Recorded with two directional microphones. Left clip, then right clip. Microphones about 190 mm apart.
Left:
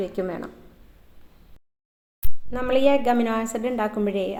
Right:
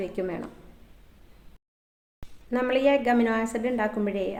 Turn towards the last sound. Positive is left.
turn(degrees=15)  # may be behind; listen again after turning